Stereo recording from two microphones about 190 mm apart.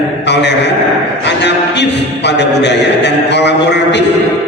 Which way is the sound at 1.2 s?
65° left (ahead or behind).